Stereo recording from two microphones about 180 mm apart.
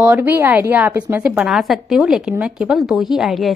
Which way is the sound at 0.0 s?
10° right (ahead or behind).